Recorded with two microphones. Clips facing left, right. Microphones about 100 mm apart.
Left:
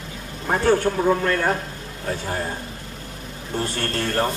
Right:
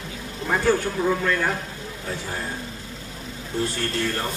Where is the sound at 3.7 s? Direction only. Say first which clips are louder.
Left 3 dB; 50° left (ahead or behind).